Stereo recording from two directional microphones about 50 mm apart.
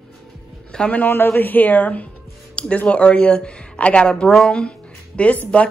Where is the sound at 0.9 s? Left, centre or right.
Left.